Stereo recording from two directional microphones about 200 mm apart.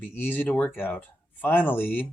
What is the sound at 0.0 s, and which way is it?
Speech, 10° left (ahead or behind).